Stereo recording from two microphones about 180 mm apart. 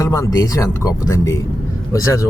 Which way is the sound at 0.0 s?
15° left (ahead or behind).